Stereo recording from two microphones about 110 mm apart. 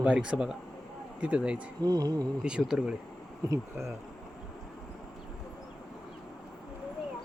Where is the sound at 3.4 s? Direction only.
30° right (ahead or behind).